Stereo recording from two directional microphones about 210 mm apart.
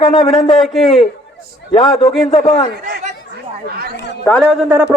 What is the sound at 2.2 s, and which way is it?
Speech, 30° left (ahead or behind).